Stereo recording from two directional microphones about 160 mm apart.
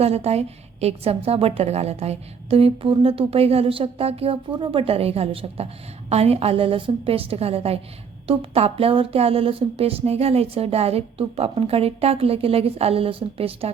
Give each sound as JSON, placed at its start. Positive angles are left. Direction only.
{"t": 0.0, "sound": "a woman's voice", "side_deg": -40}